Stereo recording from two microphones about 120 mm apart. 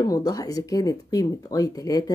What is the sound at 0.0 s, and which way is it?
Speech, 30° left (ahead or behind).